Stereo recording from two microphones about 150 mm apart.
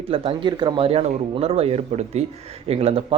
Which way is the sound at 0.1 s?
35° right (ahead or behind).